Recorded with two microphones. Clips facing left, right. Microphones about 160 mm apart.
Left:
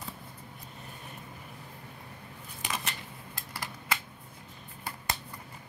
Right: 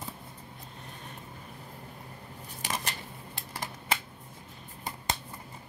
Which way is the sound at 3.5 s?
25° right (ahead or behind).